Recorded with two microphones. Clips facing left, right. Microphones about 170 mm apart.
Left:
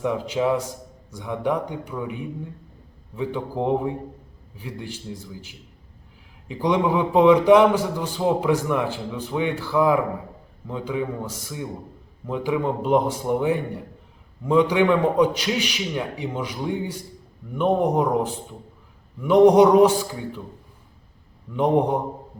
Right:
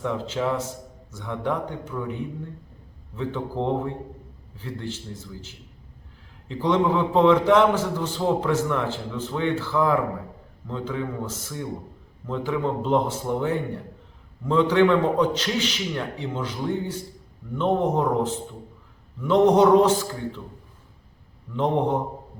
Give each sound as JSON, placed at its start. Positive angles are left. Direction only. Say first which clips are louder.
{"t": 0.0, "sound": "a man's voice", "louder": "left 3 dB", "side_deg": 15}
{"t": 21.5, "sound": "a man's voice", "louder": "left 3 dB", "side_deg": 15}